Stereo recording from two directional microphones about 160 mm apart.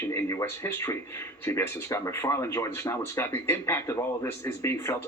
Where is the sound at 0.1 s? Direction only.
15° left (ahead or behind).